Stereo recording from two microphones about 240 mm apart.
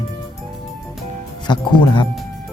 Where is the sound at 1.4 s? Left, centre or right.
Centre.